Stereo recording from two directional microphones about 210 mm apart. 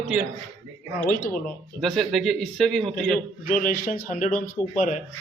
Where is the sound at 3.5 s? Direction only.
40° left (ahead or behind).